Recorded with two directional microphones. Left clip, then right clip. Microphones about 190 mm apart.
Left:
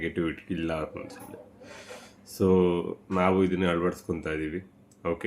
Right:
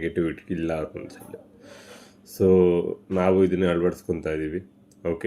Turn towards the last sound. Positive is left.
turn(degrees=-10)  # may be behind; listen again after turning